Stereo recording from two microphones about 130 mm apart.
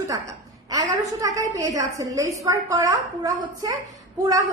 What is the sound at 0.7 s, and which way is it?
A woman's voice, 25° right (ahead or behind).